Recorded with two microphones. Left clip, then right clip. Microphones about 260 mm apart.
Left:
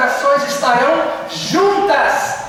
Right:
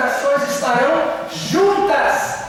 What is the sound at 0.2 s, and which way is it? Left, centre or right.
Music, centre.